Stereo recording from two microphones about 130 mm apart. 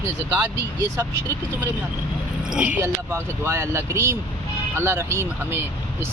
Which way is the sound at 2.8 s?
20° right (ahead or behind).